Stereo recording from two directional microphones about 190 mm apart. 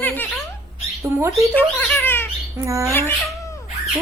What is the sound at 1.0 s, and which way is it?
Speech, 15° right (ahead or behind).